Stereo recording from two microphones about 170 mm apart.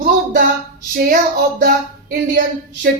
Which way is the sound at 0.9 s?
55° right (ahead or behind).